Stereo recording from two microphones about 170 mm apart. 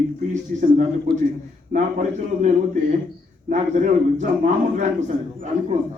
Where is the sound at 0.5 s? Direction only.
55° right (ahead or behind).